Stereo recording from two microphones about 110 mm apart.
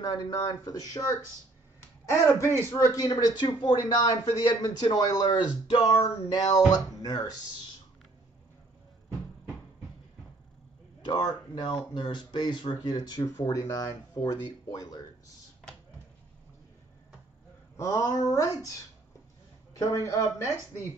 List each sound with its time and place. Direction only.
0.0 s speech: 35° left (ahead or behind)
11.1 s speech: 40° left (ahead or behind)
17.7 s speech: 25° left (ahead or behind)
19.9 s speech: 25° left (ahead or behind)